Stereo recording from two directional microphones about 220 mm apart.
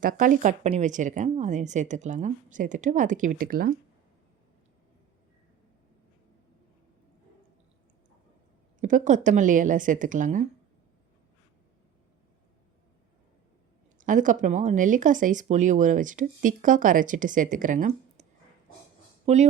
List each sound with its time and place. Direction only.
0.0 s speech: 40° right (ahead or behind)
8.8 s speech: 35° right (ahead or behind)
14.0 s speech: 35° right (ahead or behind)